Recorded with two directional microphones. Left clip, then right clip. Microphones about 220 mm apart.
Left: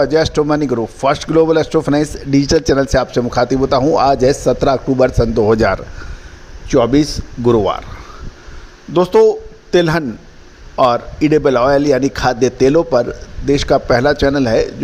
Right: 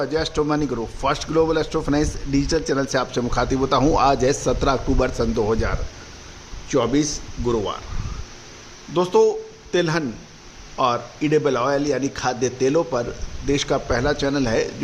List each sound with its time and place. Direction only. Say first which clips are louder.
0.0 s a man's voice: left 9 dB; 25° left (ahead or behind)
5.5 s speech: left 12 dB; 40° left (ahead or behind)
8.9 s a man's voice: left 7 dB; 30° left (ahead or behind)